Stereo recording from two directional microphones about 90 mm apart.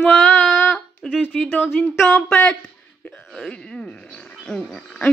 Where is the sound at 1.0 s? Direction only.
5° left (ahead or behind).